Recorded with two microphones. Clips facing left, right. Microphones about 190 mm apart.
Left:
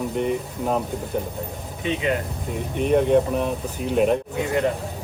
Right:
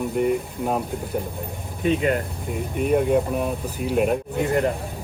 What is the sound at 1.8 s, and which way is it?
Speech, 45° right (ahead or behind).